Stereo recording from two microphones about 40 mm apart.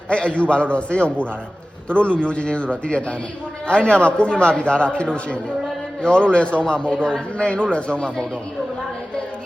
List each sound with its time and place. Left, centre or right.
0.1 s a man's voice: left